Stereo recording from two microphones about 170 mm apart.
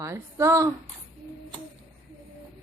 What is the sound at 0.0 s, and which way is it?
Speech, 15° right (ahead or behind).